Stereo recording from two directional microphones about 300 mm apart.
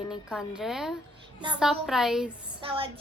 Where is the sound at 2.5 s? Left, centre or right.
Centre.